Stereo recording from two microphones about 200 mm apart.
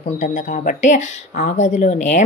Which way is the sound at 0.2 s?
35° left (ahead or behind).